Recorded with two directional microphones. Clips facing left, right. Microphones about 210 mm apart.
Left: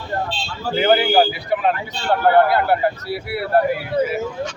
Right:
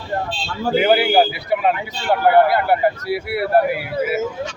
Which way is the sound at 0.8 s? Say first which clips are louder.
Even; 5° right (ahead or behind).